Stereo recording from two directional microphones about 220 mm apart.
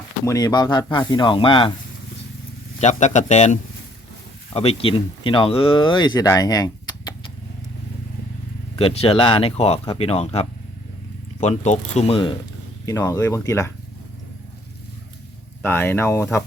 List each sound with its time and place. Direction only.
0.3 s speech: 15° left (ahead or behind)
2.8 s speech: 35° left (ahead or behind); by 7.1 s 15° left (ahead or behind)
8.8 s speech: 25° left (ahead or behind)
12.8 s speech: 15° left (ahead or behind)
15.6 s speech: 10° left (ahead or behind)